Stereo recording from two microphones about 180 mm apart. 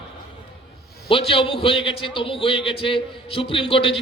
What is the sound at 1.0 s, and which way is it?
A man's voice, 30° left (ahead or behind).